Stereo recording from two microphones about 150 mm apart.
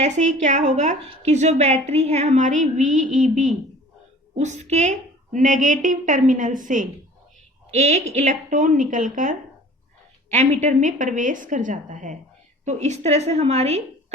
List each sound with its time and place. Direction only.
0.0 s a woman's voice: 50° right (ahead or behind)
7.7 s a woman's voice: 45° right (ahead or behind)
10.2 s a woman's voice: 50° right (ahead or behind)